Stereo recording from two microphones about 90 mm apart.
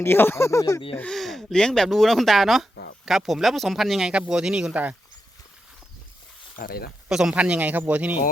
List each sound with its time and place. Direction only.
0.0 s speech: 25° left (ahead or behind)
1.0 s speech: centre (ahead or behind); by 4.9 s 15° right (ahead or behind)
7.1 s speech: 5° right (ahead or behind)